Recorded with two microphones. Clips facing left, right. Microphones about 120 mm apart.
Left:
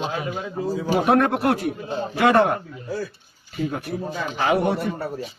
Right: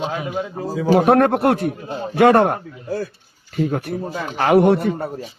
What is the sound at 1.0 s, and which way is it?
Speech, 55° right (ahead or behind).